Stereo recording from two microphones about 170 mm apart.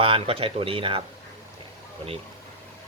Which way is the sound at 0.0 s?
30° right (ahead or behind).